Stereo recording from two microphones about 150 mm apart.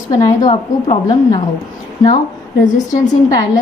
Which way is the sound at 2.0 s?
60° left (ahead or behind).